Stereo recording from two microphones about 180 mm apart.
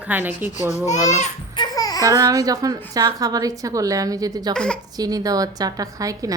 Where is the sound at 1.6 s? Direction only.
20° left (ahead or behind).